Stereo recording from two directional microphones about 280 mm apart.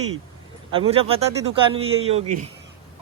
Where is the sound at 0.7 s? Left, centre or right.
Centre.